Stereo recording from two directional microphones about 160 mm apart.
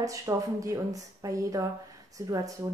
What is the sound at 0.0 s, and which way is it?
A woman's voice, 20° right (ahead or behind).